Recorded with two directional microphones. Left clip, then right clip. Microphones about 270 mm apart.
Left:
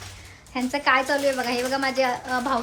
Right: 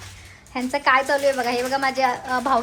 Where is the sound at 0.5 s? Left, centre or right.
Centre.